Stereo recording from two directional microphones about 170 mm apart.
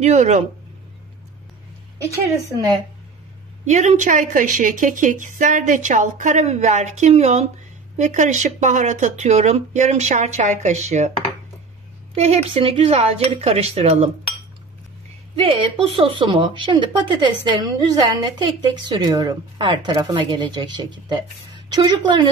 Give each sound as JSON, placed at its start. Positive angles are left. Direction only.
{"t": 0.0, "sound": "speech", "side_deg": -40}
{"t": 3.6, "sound": "a woman's voice", "side_deg": -45}
{"t": 12.2, "sound": "speech", "side_deg": -35}
{"t": 15.3, "sound": "speech", "side_deg": -30}